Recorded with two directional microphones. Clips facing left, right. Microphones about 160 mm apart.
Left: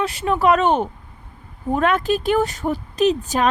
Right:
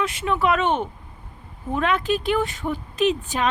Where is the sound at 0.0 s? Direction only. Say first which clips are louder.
Left 4 dB; 35° left (ahead or behind).